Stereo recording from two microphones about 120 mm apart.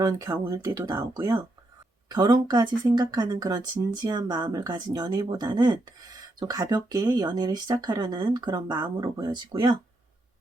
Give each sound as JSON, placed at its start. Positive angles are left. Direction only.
{"t": 0.0, "sound": "speech", "side_deg": -30}